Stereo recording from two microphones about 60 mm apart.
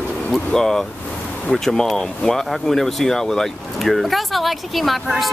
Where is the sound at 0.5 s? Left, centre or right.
Centre.